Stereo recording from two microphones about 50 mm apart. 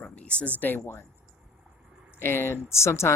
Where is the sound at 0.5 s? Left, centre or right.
Left.